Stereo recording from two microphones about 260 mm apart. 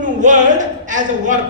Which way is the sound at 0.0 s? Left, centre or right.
Right.